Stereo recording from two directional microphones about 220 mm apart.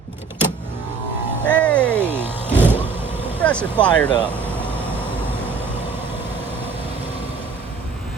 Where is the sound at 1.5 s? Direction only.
5° left (ahead or behind).